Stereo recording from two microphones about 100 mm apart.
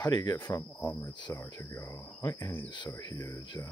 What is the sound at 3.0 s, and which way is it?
Speech, 35° left (ahead or behind).